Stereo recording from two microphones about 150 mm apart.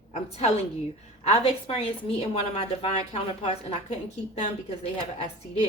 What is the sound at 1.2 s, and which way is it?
A woman's voice, 45° left (ahead or behind).